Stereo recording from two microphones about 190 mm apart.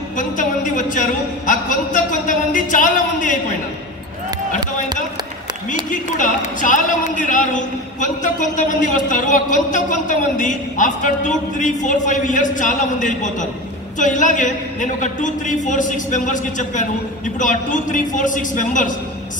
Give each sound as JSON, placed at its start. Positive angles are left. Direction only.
{"t": 0.2, "sound": "a woman's voice", "side_deg": 40}
{"t": 5.9, "sound": "a man's voice", "side_deg": 40}